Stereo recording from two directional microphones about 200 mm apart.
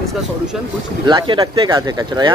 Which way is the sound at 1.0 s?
25° right (ahead or behind).